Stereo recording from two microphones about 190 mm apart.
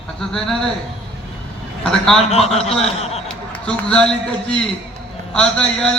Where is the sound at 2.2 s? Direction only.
35° left (ahead or behind).